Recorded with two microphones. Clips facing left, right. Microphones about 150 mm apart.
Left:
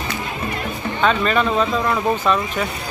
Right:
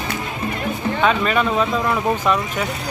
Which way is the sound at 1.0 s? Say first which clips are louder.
Left 1 dB; 5° right (ahead or behind).